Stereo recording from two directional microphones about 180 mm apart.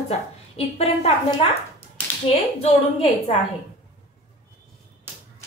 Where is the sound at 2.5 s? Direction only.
35° left (ahead or behind).